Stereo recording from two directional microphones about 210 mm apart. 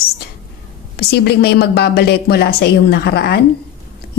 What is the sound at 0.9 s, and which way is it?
Speech, 50° left (ahead or behind).